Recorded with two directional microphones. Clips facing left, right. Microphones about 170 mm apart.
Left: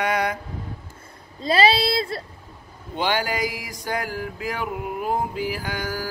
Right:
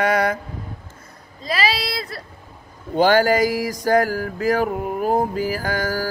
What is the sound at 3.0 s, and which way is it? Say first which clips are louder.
Mantra: right 9 dB; 45° right (ahead or behind).